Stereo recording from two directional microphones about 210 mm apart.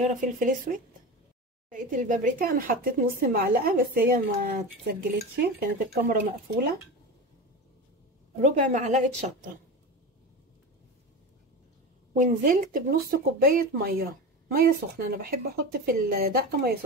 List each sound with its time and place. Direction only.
0.0 s a woman's voice: 35° right (ahead or behind)
8.4 s a woman's voice: 35° right (ahead or behind)
12.1 s speech: 40° right (ahead or behind)